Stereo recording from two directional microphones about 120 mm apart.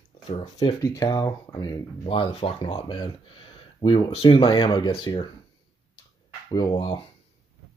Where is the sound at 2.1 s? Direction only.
50° left (ahead or behind).